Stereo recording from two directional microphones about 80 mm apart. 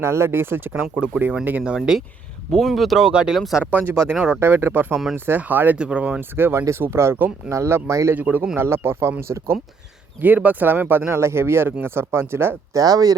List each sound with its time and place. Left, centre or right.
0.0 s speech: right
0.9 s speech: centre
2.5 s speech: centre
3.6 s speech: right
4.4 s speech: right
8.1 s speech: right
10.2 s speech: right
12.7 s speech: right